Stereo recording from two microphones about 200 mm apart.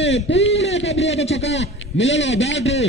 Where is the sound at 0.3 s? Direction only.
65° left (ahead or behind).